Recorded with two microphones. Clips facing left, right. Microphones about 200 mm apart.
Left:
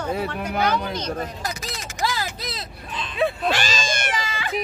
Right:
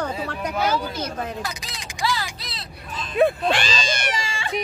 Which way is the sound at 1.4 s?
45° left (ahead or behind).